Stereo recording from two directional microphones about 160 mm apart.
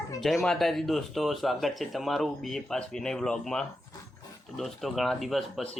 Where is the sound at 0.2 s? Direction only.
Centre (ahead or behind).